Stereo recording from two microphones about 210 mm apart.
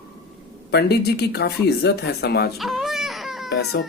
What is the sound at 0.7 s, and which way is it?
Speech, 50° left (ahead or behind).